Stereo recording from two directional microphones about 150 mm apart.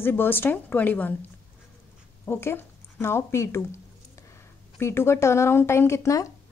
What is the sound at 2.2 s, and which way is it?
Speech, 15° left (ahead or behind).